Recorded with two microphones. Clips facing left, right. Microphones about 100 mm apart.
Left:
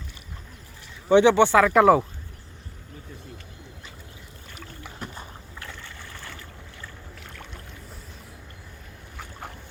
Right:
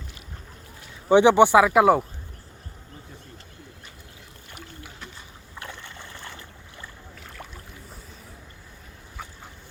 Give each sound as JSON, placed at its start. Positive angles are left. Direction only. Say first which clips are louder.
{"t": 1.0, "sound": "speech", "louder": "right 1 dB", "side_deg": -15}
{"t": 5.5, "sound": "boat", "louder": "right 3 dB", "side_deg": -20}